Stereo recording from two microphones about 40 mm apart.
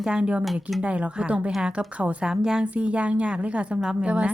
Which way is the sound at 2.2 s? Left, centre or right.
Centre.